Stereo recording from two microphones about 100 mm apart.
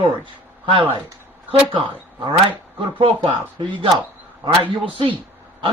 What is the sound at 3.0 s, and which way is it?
Speech, 65° right (ahead or behind).